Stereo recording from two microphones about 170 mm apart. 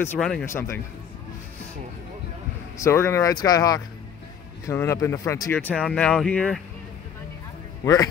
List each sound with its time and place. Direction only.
0.2 s speech: centre (ahead or behind)
0.5 s speech: 15° left (ahead or behind)
2.8 s speech: 15° left (ahead or behind)
7.8 s a man's voice: 20° left (ahead or behind)